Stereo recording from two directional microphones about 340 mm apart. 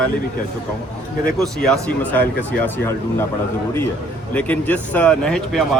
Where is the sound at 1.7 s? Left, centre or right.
Centre.